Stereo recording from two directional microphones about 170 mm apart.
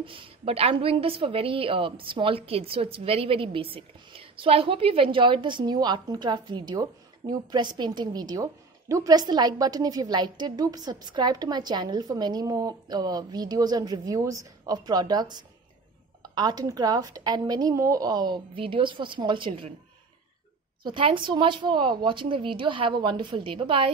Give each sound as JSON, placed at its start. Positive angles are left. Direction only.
{"t": 0.0, "sound": "a woman's voice", "side_deg": -35}
{"t": 20.8, "sound": "a woman's voice", "side_deg": -30}